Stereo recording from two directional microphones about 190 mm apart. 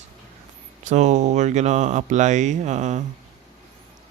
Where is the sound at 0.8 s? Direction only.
40° right (ahead or behind).